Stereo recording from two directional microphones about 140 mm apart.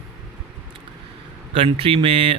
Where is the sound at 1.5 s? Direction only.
40° right (ahead or behind).